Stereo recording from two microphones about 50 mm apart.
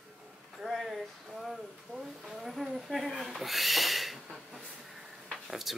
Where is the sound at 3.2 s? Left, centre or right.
Centre.